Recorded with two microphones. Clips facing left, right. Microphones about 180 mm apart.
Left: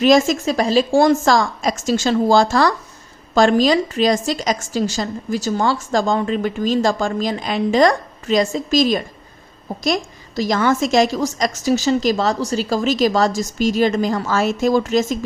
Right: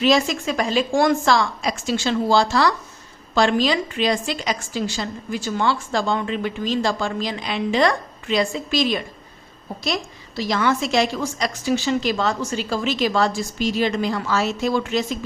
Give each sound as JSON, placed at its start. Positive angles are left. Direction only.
{"t": 0.0, "sound": "a woman's voice", "side_deg": 45}